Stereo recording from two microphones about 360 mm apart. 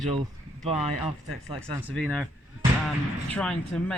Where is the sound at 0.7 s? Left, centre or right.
Centre.